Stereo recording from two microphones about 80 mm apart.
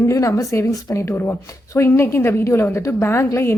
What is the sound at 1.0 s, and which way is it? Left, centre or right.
Speech, left.